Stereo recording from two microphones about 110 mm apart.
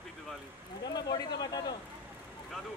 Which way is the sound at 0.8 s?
40° left (ahead or behind).